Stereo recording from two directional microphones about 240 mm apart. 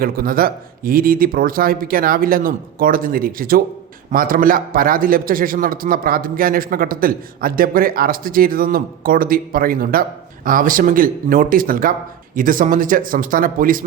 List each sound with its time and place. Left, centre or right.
0.0 s a man's voice: right